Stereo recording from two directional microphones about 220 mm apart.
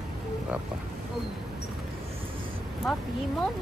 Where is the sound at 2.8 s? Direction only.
Centre (ahead or behind).